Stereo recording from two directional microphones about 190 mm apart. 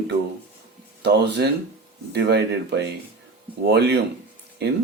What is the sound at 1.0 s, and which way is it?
Speech, 60° right (ahead or behind).